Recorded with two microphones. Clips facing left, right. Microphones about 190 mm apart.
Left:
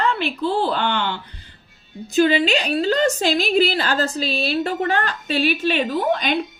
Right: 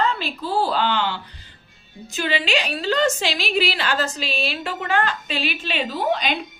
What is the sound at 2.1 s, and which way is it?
A woman's voice, 40° left (ahead or behind).